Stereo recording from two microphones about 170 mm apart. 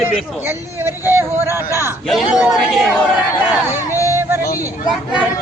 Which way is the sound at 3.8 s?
15° left (ahead or behind).